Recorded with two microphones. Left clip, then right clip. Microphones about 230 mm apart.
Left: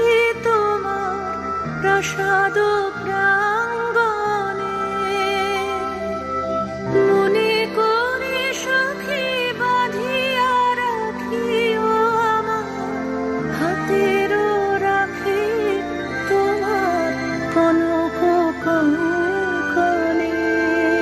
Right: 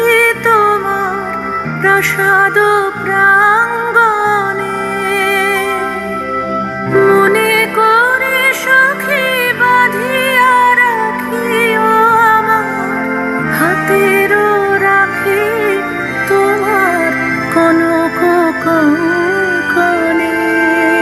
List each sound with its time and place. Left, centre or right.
0.0 s music: right
1.8 s music: right
6.9 s music: right
14.0 s music: right